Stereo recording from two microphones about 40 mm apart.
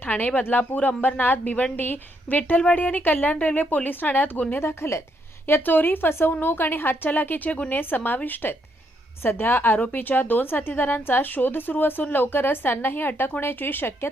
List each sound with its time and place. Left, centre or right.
0.0 s speech: left
0.5 s a woman's voice: left
0.8 s a woman's voice: left
4.5 s speech: left
5.5 s a woman's voice: left
7.1 s a woman's voice: left